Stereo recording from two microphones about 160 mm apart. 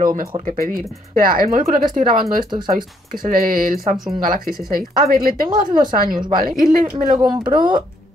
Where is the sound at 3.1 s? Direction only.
65° right (ahead or behind).